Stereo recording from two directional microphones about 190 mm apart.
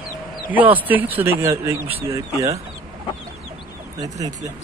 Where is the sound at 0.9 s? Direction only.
10° right (ahead or behind).